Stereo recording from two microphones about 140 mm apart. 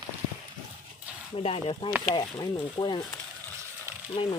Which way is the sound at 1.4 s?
45° left (ahead or behind).